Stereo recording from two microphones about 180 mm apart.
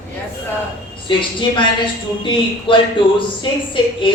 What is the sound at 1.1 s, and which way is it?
Speech, 25° left (ahead or behind).